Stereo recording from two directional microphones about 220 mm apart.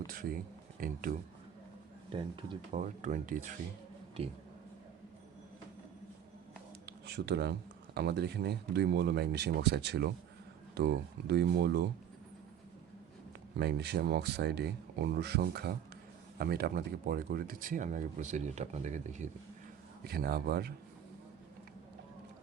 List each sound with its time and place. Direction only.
0.1 s speech: 40° right (ahead or behind)
2.0 s speech: 20° right (ahead or behind)
2.7 s speech: 35° right (ahead or behind)
7.1 s speech: 50° right (ahead or behind)
13.6 s speech: 50° right (ahead or behind); by 19.3 s 35° right (ahead or behind)
20.1 s speech: 45° right (ahead or behind)